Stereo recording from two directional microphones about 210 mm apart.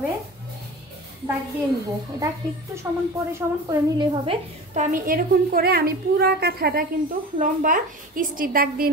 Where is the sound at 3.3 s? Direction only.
15° right (ahead or behind).